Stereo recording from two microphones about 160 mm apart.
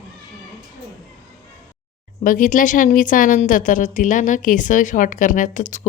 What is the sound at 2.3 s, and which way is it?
A woman's voice, 55° left (ahead or behind).